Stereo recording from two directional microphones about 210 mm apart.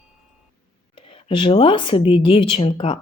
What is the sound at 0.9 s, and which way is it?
Speech, 25° left (ahead or behind).